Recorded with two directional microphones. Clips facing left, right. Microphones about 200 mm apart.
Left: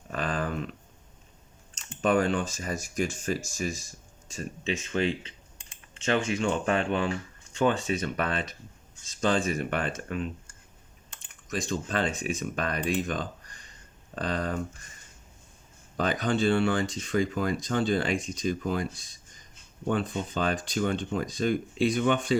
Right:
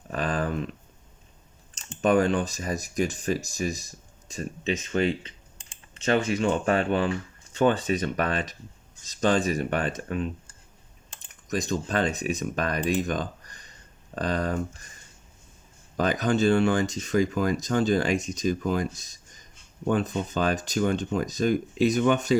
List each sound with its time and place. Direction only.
0.1 s a sound: 40° right (ahead or behind)
1.7 s speech: 40° right (ahead or behind)
9.2 s speech: 40° right (ahead or behind)
16.0 s speech: 45° right (ahead or behind)